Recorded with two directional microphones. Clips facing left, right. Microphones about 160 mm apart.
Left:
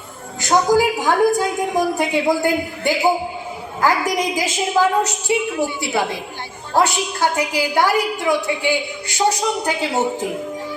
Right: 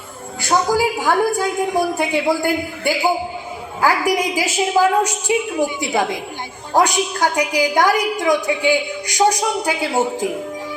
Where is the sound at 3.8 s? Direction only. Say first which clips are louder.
Right 1 dB; 10° right (ahead or behind).